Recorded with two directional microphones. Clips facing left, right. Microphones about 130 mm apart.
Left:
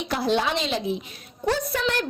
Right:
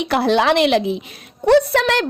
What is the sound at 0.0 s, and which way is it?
A woman's voice, 70° right (ahead or behind).